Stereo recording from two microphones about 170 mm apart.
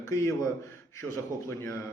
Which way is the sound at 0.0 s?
15° left (ahead or behind).